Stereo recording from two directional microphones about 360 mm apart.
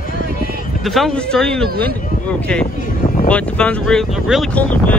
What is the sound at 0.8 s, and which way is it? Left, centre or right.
Speech, centre.